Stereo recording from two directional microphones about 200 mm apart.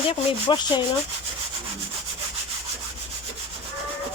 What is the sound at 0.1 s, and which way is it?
Rub, 25° left (ahead or behind).